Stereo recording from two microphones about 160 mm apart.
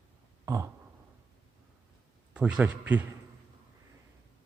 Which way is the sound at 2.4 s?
5° right (ahead or behind).